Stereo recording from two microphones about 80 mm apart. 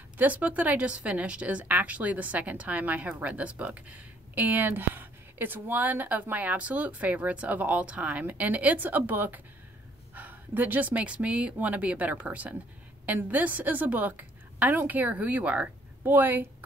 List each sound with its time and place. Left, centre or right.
0.2 s a woman's voice: centre